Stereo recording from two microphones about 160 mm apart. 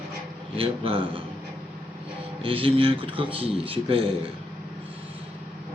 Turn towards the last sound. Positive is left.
turn(degrees=-35)  # may be behind; listen again after turning